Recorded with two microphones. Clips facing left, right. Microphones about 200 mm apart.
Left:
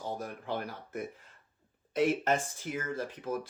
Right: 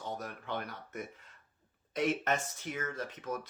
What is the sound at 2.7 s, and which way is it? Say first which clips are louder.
Speech: left 3 dB; 30° left (ahead or behind).